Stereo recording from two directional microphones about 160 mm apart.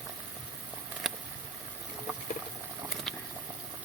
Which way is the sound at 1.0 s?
Centre (ahead or behind).